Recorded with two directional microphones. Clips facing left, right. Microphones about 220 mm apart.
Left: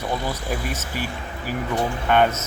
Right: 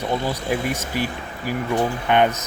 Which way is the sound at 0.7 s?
15° right (ahead or behind).